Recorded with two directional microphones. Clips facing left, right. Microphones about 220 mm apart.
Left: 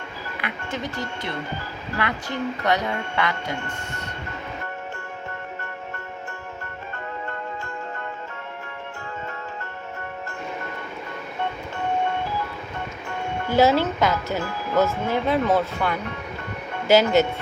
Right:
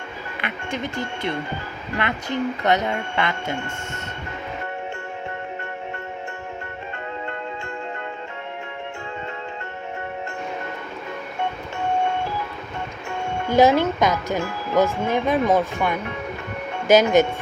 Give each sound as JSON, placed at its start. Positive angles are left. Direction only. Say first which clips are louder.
{"t": 2.0, "sound": "speech", "louder": "right 3 dB", "side_deg": -20}
{"t": 13.5, "sound": "speech", "louder": "right 2 dB", "side_deg": -15}